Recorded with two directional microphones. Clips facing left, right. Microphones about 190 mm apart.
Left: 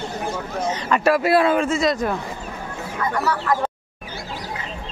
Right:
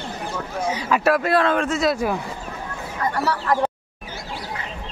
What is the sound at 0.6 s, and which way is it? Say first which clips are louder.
Speech: even; 10° right (ahead or behind).